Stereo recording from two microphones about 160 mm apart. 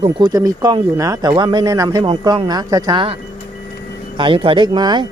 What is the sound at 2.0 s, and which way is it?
Speech, 30° right (ahead or behind).